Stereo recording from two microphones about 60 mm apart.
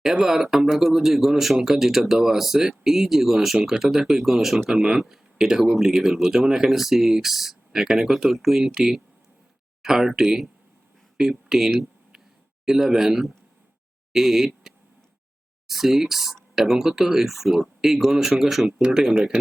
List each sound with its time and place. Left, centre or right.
0.0 s speech: centre